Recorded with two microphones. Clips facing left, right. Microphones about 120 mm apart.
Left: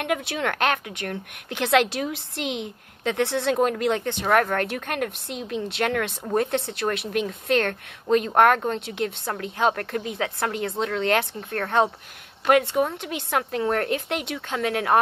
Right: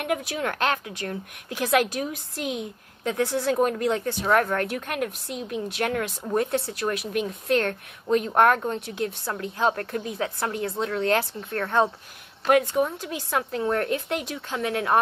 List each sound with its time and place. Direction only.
0.3 s a woman's voice: 70° left (ahead or behind); by 2.1 s 85° left
2.4 s a woman's voice: 20° left (ahead or behind)
3.0 s a woman's voice: 70° left (ahead or behind)
7.1 s speech: 25° right (ahead or behind)
7.4 s a woman's voice: 70° left (ahead or behind)
11.5 s speech: 50° left (ahead or behind)
12.4 s a woman's voice: 75° left (ahead or behind)